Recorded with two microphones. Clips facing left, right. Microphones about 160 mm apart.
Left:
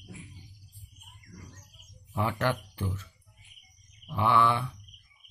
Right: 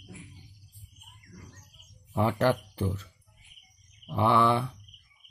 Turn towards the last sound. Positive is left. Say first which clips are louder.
# right 2 dB
turn(degrees=-35)  # may be behind; listen again after turning